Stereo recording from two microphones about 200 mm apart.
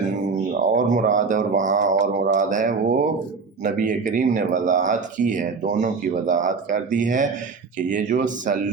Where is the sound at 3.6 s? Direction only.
40° right (ahead or behind).